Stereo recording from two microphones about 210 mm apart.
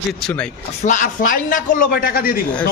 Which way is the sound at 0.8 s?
35° left (ahead or behind).